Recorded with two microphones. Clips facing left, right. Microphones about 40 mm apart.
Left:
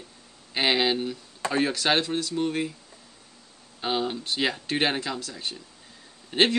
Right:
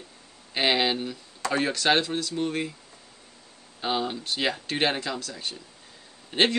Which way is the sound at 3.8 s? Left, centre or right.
Centre.